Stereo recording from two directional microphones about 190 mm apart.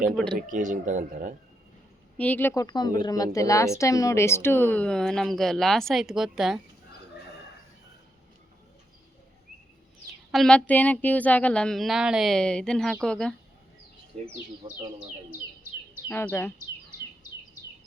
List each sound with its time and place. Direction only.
0.3 s speech: 45° right (ahead or behind)
2.1 s speech: 10° left (ahead or behind)
10.3 s speech: 5° left (ahead or behind)
14.1 s speech: 35° right (ahead or behind)
16.0 s speech: 10° left (ahead or behind)